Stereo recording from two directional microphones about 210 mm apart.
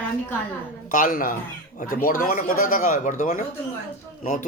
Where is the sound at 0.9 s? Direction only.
40° left (ahead or behind).